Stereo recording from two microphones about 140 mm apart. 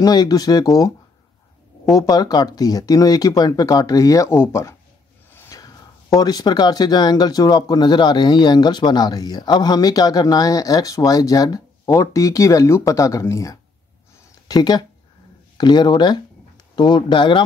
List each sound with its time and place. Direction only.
0.0 s speech: 30° left (ahead or behind)
5.3 s a sound: 15° left (ahead or behind)
5.6 s speech: 25° left (ahead or behind)